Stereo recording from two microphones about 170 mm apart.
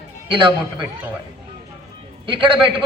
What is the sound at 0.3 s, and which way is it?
Speech, 30° right (ahead or behind).